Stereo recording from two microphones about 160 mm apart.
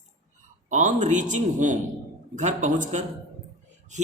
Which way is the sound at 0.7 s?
50° right (ahead or behind).